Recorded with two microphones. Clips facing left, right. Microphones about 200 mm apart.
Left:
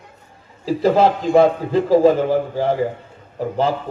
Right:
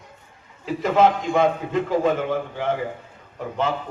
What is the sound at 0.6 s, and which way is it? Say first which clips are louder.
A man's voice: left 3 dB; 35° left (ahead or behind).